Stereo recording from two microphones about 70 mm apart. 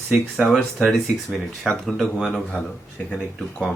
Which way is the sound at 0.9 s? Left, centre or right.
Centre.